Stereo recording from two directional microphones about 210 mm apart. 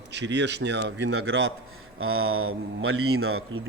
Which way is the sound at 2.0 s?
85° right.